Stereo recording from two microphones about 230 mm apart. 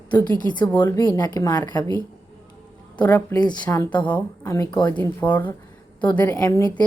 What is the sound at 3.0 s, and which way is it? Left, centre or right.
A woman's voice, centre.